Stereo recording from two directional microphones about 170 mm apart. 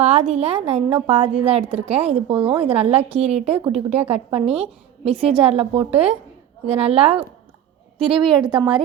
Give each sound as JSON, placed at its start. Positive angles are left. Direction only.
{"t": 0.0, "sound": "a woman's voice", "side_deg": -40}